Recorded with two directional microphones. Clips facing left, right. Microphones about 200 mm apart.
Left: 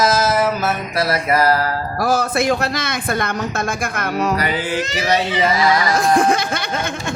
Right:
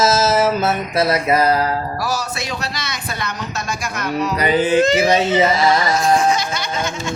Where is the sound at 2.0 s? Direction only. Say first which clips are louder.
Left 6 dB; 55° left (ahead or behind).